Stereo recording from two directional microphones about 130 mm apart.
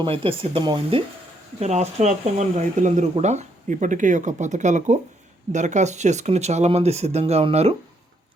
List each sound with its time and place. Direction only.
0.0 s speech: 45° right (ahead or behind)
1.5 s speech: 55° right (ahead or behind)